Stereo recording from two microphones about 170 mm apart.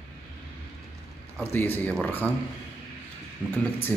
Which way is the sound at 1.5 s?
10° left (ahead or behind).